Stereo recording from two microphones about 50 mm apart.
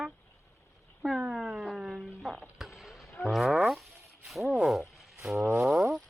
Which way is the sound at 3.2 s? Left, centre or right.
Centre.